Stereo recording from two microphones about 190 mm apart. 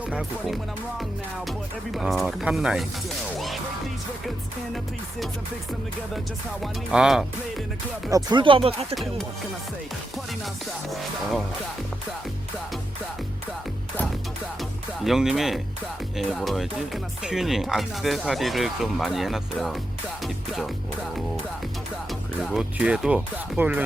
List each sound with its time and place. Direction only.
0.1 s speech: centre (ahead or behind)
3.3 s music: centre (ahead or behind)
6.6 s speech: centre (ahead or behind)
8.1 s speech: 25° right (ahead or behind)
10.4 s speech: centre (ahead or behind)
14.6 s speech: centre (ahead or behind)
20.2 s music: centre (ahead or behind)
22.4 s speech: 5° right (ahead or behind)